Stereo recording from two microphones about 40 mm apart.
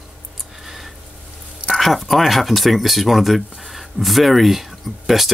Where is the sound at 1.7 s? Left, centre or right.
Centre.